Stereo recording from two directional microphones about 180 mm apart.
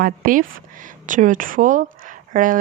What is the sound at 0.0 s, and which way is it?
Speech, 50° right (ahead or behind).